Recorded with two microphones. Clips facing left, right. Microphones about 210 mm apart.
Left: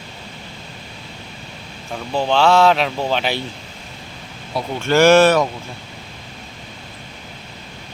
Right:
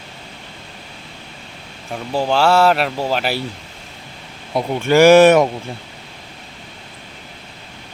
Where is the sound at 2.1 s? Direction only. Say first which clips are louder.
Even; 5° right (ahead or behind).